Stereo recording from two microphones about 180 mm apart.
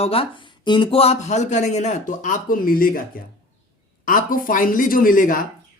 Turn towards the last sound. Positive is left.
turn(degrees=50)  # may be behind; listen again after turning